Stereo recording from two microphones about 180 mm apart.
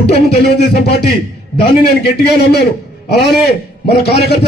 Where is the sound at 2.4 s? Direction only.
60° left (ahead or behind).